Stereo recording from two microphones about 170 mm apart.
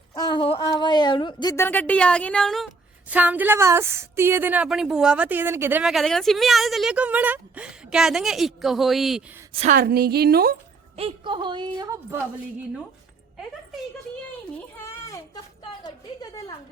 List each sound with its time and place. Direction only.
0.1 s a sound: 25° left (ahead or behind); by 2.6 s centre (ahead or behind)
3.1 s a woman's voice: 10° right (ahead or behind)
5.8 s a woman's voice: centre (ahead or behind)
9.6 s a woman's voice: 50° right (ahead or behind)
10.9 s a woman's voice: 30° right (ahead or behind)
14.8 s a sound: 20° left (ahead or behind)